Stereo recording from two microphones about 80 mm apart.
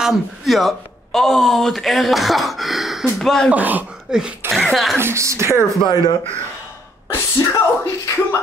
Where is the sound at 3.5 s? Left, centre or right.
Right.